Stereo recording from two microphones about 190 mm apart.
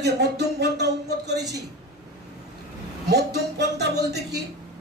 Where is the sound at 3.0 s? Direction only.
60° right (ahead or behind).